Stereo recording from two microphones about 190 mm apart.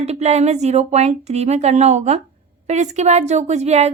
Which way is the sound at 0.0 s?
35° right (ahead or behind).